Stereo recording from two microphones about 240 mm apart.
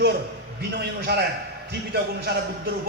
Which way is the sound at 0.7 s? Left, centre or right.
Right.